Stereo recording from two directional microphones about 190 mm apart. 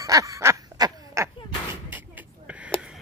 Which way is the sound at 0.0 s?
20° right (ahead or behind).